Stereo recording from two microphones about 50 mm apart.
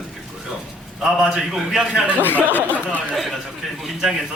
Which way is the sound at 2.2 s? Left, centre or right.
Left.